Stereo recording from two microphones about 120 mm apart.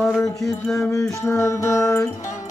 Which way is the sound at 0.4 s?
Centre (ahead or behind).